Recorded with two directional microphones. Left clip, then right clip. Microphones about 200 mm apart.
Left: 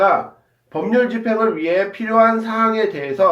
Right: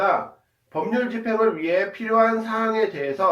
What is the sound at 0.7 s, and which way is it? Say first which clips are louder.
Speech: left 7 dB; 45° left (ahead or behind).